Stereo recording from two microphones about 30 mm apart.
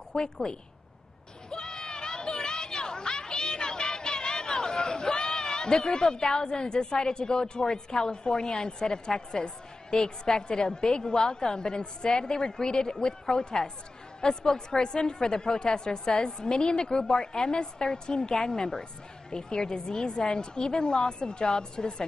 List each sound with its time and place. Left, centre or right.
0.1 s a woman's voice: left